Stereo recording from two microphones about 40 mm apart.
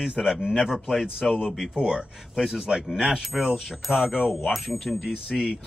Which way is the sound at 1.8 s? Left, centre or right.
Centre.